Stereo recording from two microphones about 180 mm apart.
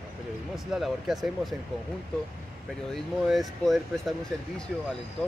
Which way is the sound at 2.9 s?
Centre (ahead or behind).